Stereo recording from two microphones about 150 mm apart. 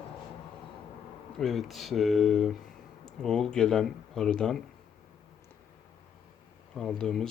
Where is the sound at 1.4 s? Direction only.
Centre (ahead or behind).